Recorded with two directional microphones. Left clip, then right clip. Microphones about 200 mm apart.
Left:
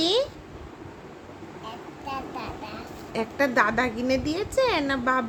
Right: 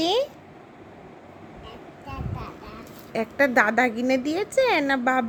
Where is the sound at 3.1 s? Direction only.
20° right (ahead or behind).